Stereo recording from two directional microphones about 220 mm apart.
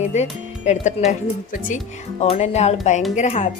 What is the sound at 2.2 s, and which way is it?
A woman's voice, 30° left (ahead or behind).